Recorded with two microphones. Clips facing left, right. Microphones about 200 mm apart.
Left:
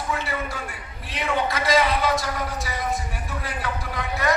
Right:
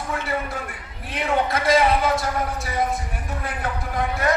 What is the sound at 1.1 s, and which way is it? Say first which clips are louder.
A man's voice: right 2 dB; 55° right (ahead or behind).